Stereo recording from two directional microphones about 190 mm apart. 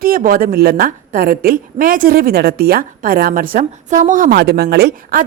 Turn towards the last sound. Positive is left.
turn(degrees=-55)  # may be behind; listen again after turning